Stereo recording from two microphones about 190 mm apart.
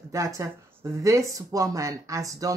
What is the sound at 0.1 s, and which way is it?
A woman's voice, 15° right (ahead or behind).